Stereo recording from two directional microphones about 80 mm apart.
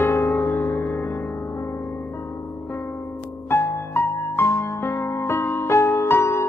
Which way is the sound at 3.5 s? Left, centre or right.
Left.